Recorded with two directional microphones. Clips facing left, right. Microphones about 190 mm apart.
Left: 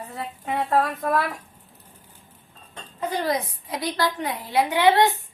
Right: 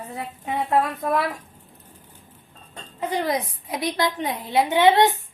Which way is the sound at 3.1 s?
20° right (ahead or behind).